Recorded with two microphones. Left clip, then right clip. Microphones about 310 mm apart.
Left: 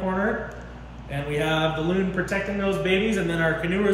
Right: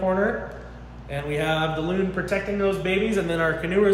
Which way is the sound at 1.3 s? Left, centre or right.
Centre.